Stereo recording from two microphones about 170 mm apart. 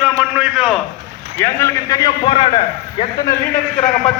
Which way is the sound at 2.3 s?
35° left (ahead or behind).